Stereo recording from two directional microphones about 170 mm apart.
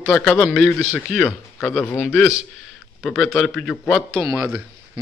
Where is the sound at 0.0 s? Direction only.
5° left (ahead or behind).